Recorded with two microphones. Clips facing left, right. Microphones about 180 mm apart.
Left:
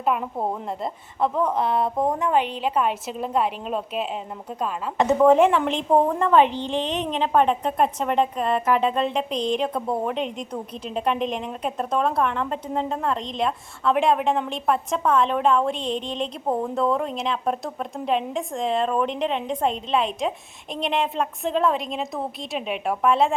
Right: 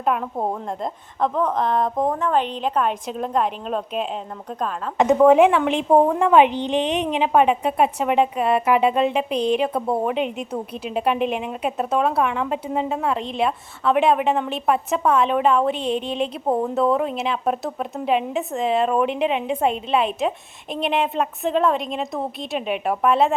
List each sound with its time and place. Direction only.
0.0 s a woman's voice: centre (ahead or behind)
5.2 s a woman's voice: 5° right (ahead or behind)
9.8 s a woman's voice: 25° right (ahead or behind)
10.1 s a woman's voice: 5° right (ahead or behind)